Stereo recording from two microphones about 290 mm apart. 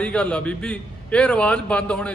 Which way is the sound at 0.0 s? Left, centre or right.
Centre.